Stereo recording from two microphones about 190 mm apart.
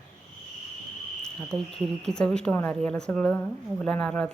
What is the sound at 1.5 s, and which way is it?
Speech, 20° right (ahead or behind).